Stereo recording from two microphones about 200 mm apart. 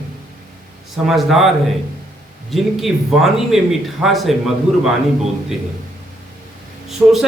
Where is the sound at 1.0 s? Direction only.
Centre (ahead or behind).